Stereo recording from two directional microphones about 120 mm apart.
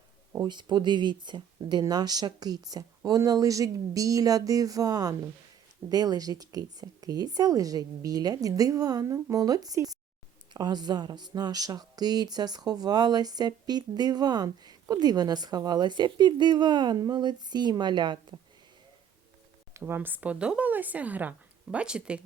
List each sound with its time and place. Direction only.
0.4 s speech: 40° right (ahead or behind)
19.7 s speech: 20° right (ahead or behind)